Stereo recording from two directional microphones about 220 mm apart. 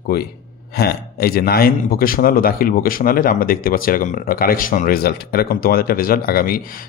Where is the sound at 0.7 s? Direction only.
45° left (ahead or behind).